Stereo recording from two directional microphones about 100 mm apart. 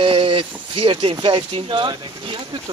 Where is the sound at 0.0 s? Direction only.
60° right (ahead or behind).